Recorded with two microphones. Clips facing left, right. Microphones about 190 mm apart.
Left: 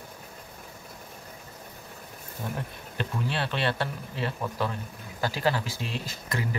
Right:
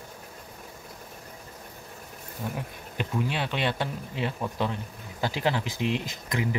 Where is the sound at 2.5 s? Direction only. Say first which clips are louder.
Even; 15° right (ahead or behind).